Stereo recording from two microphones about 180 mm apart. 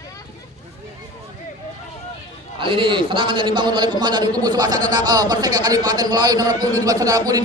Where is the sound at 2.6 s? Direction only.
30° right (ahead or behind).